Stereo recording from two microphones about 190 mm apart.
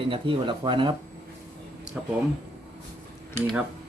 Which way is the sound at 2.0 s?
5° right (ahead or behind).